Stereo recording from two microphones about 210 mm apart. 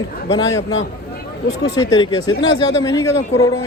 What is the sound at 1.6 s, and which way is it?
Speech, 15° left (ahead or behind).